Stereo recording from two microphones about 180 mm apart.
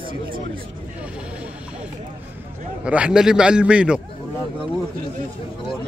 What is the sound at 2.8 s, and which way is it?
A man's voice, 5° right (ahead or behind).